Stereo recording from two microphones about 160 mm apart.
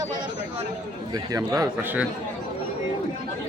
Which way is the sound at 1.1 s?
20° right (ahead or behind).